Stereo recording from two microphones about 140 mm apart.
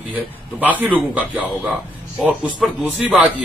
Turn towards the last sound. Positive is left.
turn(degrees=-10)  # may be behind; listen again after turning